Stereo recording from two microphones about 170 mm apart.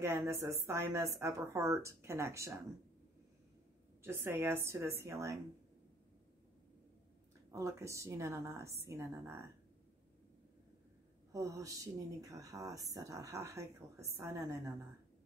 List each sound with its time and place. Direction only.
0.0 s speech: 15° right (ahead or behind)
4.0 s speech: 15° right (ahead or behind)
7.5 s speech: 15° right (ahead or behind)
11.3 s speech: 20° right (ahead or behind)